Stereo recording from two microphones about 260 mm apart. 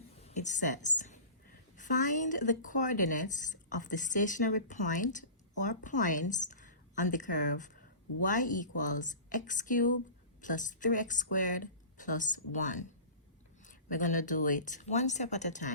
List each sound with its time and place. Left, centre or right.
0.2 s a woman's voice: left